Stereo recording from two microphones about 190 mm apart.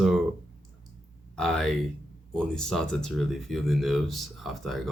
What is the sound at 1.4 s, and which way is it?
Speech, centre (ahead or behind).